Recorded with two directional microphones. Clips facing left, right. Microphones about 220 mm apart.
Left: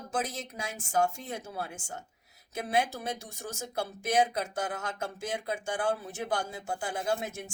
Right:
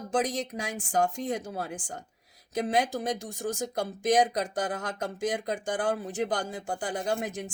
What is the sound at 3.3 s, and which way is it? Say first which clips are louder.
Speech: right 8 dB; 35° right (ahead or behind).